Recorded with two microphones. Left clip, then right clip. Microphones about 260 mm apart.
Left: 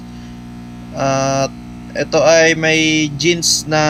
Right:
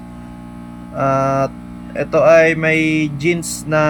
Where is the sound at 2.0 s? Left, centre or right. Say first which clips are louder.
Right 1 dB; centre.